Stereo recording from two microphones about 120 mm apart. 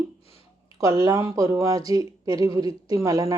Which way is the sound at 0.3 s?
55° left (ahead or behind).